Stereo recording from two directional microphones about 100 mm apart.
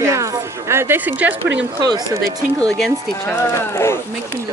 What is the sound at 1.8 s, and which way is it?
Speech, 40° right (ahead or behind).